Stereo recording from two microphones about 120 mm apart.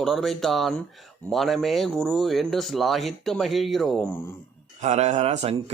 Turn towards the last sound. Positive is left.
turn(degrees=-60)  # may be behind; listen again after turning